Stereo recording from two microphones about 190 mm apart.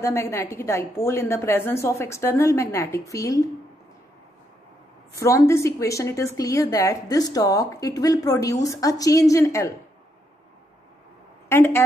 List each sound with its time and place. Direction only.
0.0 s a woman's voice: 15° left (ahead or behind)
5.2 s a woman's voice: 15° left (ahead or behind)
11.4 s a woman's voice: 10° left (ahead or behind)